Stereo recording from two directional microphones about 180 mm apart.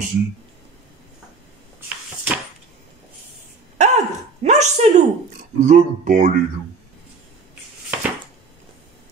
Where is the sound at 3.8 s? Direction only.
40° right (ahead or behind).